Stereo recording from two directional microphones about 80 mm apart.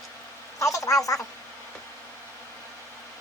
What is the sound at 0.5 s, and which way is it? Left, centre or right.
Speech, left.